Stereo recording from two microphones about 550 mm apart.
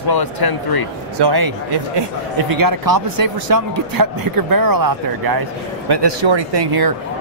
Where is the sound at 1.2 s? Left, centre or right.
Right.